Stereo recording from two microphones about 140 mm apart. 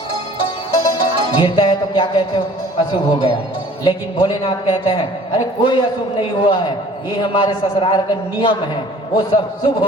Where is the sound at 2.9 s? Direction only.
35° left (ahead or behind).